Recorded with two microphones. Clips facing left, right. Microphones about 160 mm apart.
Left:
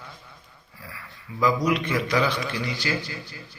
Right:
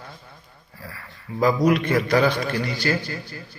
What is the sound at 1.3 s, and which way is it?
A man's voice, 45° right (ahead or behind).